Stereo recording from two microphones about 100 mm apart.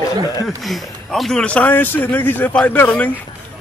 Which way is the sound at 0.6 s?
Centre (ahead or behind).